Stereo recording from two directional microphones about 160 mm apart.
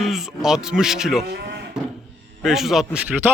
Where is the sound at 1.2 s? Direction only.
85° right.